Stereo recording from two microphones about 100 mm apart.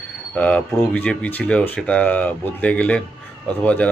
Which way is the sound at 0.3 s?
15° left (ahead or behind).